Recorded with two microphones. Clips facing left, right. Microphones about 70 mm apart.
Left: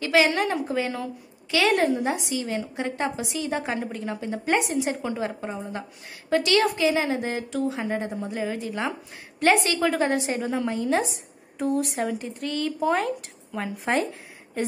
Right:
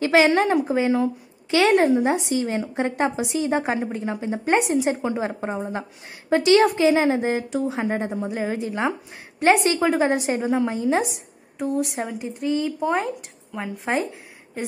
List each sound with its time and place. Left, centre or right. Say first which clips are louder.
0.0 s a woman's voice: right 4 dB; right
11.5 s speech: right 1 dB; centre